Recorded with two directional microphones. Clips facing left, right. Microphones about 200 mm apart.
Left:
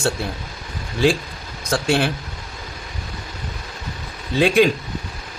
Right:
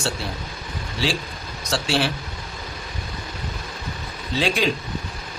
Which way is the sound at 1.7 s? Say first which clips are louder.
Left 4 dB; 55° left (ahead or behind).